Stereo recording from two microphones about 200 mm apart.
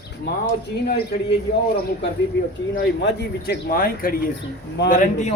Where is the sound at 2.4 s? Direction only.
65° left (ahead or behind).